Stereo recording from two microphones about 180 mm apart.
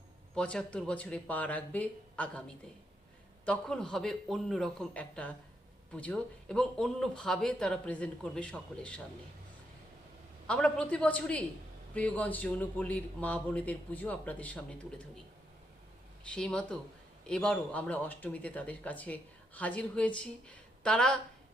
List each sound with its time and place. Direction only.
0.3 s speech: 5° left (ahead or behind)
3.4 s speech: 5° left (ahead or behind)
10.4 s speech: 5° left (ahead or behind)
16.2 s speech: 5° left (ahead or behind)